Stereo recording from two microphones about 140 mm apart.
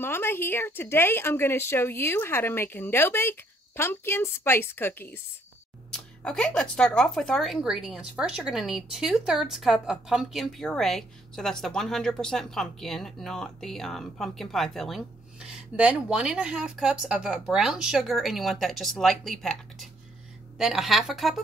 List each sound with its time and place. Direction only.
0.0 s a woman's voice: 15° left (ahead or behind); by 21.4 s centre (ahead or behind)